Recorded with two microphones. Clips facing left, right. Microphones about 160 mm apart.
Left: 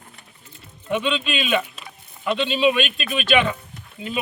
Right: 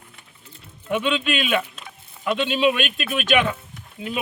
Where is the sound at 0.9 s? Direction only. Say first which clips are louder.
Right 1 dB; 5° right (ahead or behind).